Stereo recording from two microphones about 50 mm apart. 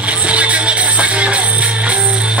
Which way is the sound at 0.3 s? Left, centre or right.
Right.